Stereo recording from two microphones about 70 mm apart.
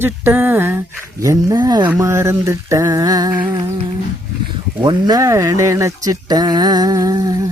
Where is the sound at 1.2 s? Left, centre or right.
Right.